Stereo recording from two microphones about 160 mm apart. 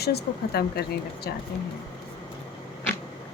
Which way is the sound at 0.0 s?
90° left.